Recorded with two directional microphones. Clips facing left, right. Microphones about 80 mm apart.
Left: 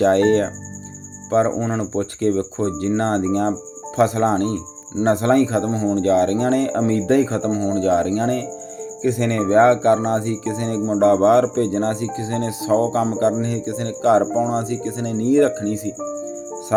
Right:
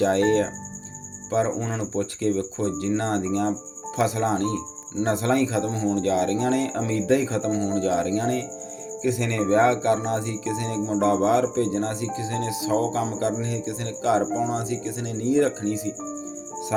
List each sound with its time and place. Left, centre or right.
0.0 s speech: left